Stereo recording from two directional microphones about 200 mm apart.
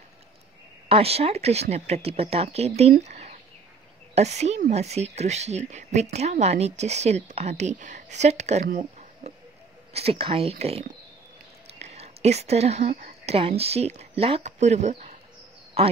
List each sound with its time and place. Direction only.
0.8 s speech: 30° right (ahead or behind)